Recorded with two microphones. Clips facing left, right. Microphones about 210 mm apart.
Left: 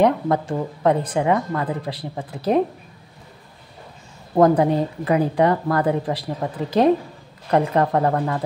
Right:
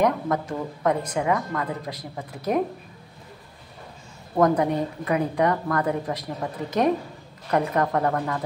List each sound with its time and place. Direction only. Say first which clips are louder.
0.0 s speech: left 4 dB; 30° left (ahead or behind)
4.4 s speech: left 5 dB; 30° left (ahead or behind)